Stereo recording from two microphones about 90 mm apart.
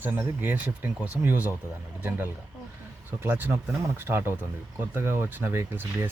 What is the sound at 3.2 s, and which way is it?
Speech, 25° right (ahead or behind).